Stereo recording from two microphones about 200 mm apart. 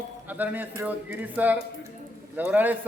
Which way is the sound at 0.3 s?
10° right (ahead or behind).